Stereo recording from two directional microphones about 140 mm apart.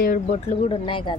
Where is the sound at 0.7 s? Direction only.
35° left (ahead or behind).